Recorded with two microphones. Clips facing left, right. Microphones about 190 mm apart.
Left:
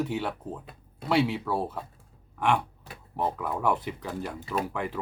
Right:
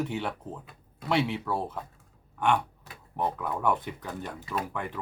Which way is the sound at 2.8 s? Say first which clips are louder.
Left 1 dB; 25° left (ahead or behind).